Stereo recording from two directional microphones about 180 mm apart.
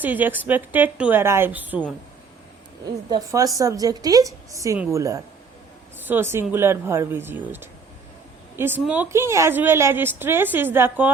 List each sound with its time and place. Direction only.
0.0 s a woman's voice: 10° right (ahead or behind)
3.1 s a woman's voice: 20° right (ahead or behind)